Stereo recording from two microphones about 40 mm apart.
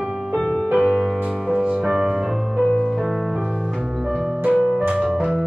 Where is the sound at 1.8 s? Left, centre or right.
Centre.